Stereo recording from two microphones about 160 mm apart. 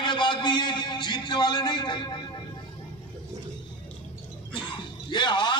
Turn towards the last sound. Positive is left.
turn(degrees=30)  # may be behind; listen again after turning